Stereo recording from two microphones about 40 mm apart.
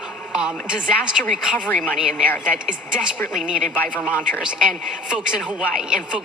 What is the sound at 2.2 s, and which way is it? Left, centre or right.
Speech, left.